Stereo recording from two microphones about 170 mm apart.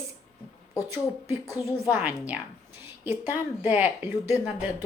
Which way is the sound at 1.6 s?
10° right (ahead or behind).